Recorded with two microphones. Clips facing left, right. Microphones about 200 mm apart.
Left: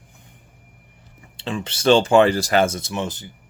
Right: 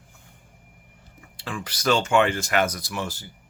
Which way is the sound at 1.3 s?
25° left (ahead or behind).